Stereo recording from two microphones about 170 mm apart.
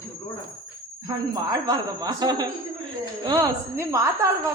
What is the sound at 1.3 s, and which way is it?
A man's voice, 20° right (ahead or behind).